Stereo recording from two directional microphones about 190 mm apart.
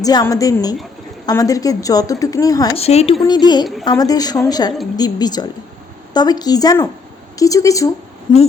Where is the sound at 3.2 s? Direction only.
20° left (ahead or behind).